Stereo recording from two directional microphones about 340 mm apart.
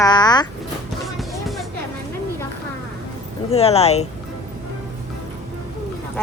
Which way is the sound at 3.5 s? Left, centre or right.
Centre.